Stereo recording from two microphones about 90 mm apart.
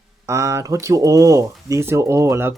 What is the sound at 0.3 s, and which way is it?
Speech, 35° right (ahead or behind).